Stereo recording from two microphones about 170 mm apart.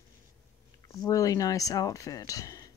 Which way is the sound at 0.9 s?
20° left (ahead or behind).